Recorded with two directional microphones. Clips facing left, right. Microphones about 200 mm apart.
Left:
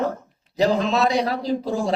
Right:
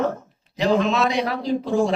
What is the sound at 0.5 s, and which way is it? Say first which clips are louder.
A woman's voice: even; 35° left (ahead or behind).